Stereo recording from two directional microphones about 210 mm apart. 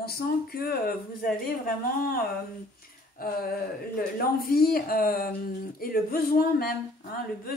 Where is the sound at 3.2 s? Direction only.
45° left (ahead or behind).